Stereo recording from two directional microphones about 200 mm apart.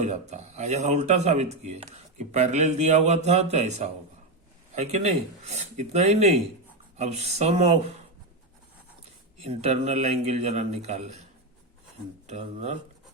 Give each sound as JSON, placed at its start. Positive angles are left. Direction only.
{"t": 0.0, "sound": "speech", "side_deg": -35}
{"t": 9.4, "sound": "speech", "side_deg": -30}
{"t": 12.3, "sound": "speech", "side_deg": -35}